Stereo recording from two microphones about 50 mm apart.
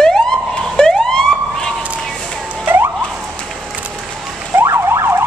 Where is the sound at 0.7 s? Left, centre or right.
Centre.